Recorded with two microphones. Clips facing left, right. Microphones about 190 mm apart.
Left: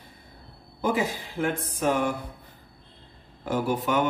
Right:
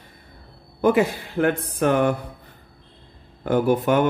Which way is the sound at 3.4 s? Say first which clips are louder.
Right 7 dB; 60° right (ahead or behind).